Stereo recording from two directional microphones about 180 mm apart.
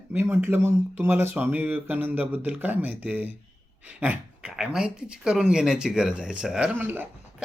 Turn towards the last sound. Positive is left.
turn(degrees=-10)  # may be behind; listen again after turning